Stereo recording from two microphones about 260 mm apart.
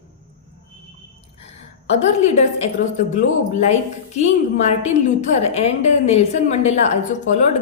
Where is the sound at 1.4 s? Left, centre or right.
Left.